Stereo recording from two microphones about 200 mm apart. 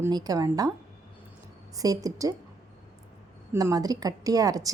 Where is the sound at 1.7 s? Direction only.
15° right (ahead or behind).